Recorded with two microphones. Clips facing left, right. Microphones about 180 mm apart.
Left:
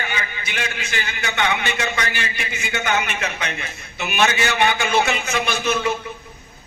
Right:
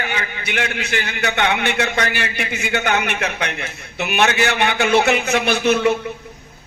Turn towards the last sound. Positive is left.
turn(degrees=-60)  # may be behind; listen again after turning